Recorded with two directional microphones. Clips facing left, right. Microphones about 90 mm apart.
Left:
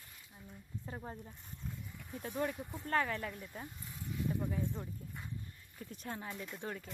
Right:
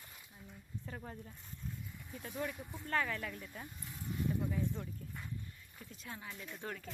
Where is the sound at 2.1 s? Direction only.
40° left (ahead or behind).